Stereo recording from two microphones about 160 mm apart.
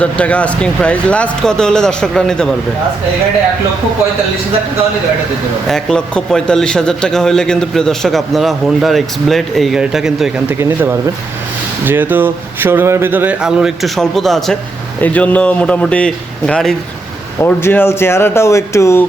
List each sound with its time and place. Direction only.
0.0 s a man's voice: 10° left (ahead or behind)
5.6 s a man's voice: 5° left (ahead or behind)
17.4 s speech: 15° left (ahead or behind)